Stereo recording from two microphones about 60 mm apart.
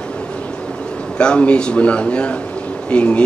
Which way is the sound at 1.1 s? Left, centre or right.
Centre.